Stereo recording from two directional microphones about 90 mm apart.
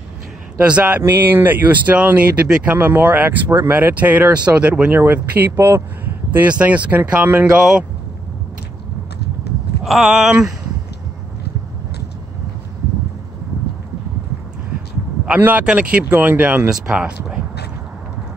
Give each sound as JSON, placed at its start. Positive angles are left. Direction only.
{"t": 0.7, "sound": "speech", "side_deg": -15}
{"t": 1.0, "sound": "speech", "side_deg": -25}
{"t": 9.8, "sound": "speech", "side_deg": -5}
{"t": 15.2, "sound": "speech", "side_deg": -15}
{"t": 16.7, "sound": "speech", "side_deg": -5}